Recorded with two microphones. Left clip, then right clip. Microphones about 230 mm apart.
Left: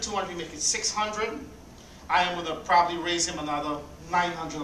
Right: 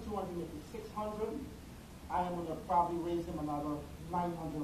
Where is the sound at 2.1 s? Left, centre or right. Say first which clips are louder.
Left 11 dB; left.